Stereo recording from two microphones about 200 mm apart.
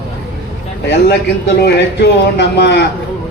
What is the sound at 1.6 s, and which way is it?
A man's voice, 55° left (ahead or behind).